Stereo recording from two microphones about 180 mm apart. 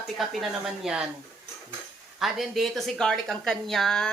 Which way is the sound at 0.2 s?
Centre (ahead or behind).